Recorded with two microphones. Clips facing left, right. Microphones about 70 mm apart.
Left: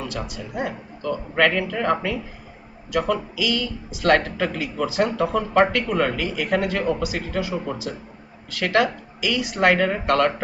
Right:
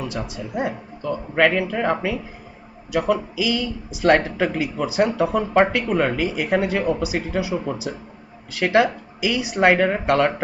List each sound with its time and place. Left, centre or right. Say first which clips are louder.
0.2 s speech: right 3 dB; right